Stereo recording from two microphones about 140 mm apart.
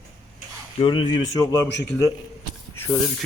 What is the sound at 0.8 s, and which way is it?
Speech, 35° left (ahead or behind).